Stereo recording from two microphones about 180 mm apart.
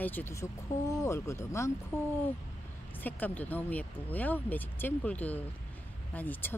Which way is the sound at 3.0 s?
10° left (ahead or behind).